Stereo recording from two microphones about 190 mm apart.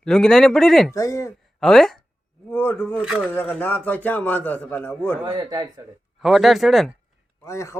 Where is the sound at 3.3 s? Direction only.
10° left (ahead or behind).